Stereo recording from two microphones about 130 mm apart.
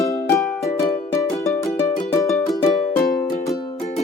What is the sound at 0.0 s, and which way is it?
Music, 20° left (ahead or behind).